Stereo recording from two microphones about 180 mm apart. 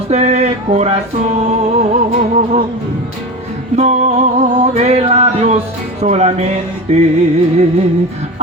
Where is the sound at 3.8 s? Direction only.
35° right (ahead or behind).